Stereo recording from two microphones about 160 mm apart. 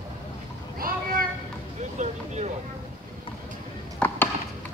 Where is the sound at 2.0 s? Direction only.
45° right (ahead or behind).